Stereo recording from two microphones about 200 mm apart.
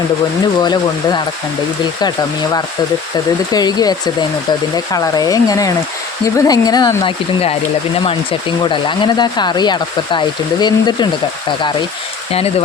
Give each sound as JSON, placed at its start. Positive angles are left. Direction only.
{"t": 0.6, "sound": "speech", "side_deg": 20}
{"t": 12.3, "sound": "speech", "side_deg": 30}